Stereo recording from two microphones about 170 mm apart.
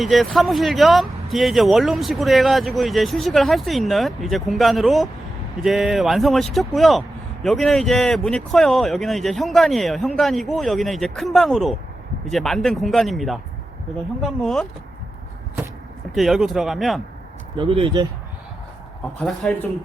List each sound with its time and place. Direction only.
0.0 s speech: centre (ahead or behind)
16.1 s speech: centre (ahead or behind)
17.6 s speech: 35° right (ahead or behind)
19.2 s speech: 5° left (ahead or behind)